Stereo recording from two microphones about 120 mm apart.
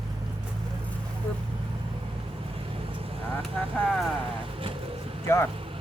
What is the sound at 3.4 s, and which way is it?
Speech, 5° left (ahead or behind).